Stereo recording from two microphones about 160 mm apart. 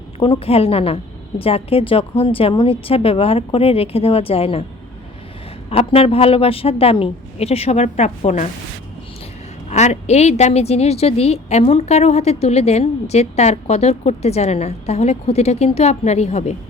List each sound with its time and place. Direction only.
0.2 s speech: 35° left (ahead or behind)
5.7 s speech: 35° left (ahead or behind)
9.6 s a woman's voice: 45° left (ahead or behind)